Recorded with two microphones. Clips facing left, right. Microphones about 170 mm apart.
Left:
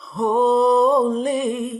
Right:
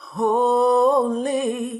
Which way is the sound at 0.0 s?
50° right (ahead or behind).